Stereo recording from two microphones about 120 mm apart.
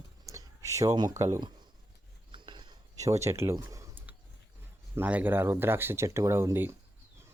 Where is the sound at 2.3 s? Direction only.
40° right (ahead or behind).